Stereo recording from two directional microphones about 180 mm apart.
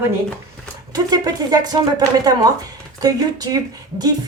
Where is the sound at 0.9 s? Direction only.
20° right (ahead or behind).